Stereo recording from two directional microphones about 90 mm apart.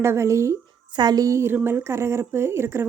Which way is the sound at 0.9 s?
50° right (ahead or behind).